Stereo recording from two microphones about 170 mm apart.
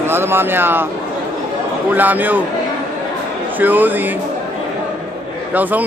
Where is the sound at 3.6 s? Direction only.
10° right (ahead or behind).